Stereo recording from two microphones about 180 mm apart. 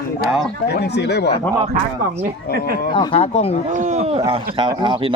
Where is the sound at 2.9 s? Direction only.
30° left (ahead or behind).